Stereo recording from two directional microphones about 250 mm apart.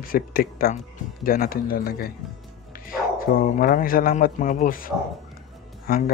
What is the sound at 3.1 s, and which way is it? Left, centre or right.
Speech, left.